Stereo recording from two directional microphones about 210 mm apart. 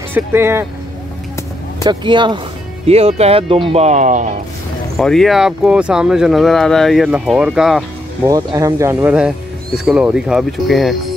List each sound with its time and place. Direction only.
0.1 s speech: 10° right (ahead or behind)
1.8 s speech: 20° right (ahead or behind)
4.9 s speech: centre (ahead or behind)
8.3 s speech: 15° right (ahead or behind); by 11.0 s centre (ahead or behind)